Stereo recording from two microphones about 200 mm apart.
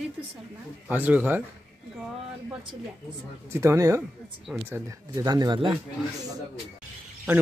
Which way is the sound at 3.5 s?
15° right (ahead or behind).